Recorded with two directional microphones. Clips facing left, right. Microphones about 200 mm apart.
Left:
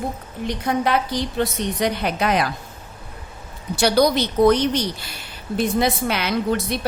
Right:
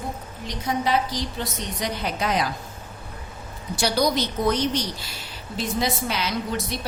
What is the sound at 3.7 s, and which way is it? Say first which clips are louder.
Speech: left 5 dB; 60° left (ahead or behind).